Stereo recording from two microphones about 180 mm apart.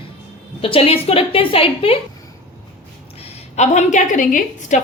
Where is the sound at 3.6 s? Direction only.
40° left (ahead or behind).